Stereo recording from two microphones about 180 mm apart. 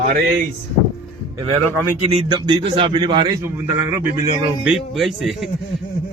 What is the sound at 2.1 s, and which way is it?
A man's voice, 30° right (ahead or behind).